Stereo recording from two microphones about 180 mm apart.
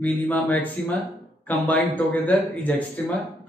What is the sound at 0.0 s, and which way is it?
Speech, 10° left (ahead or behind).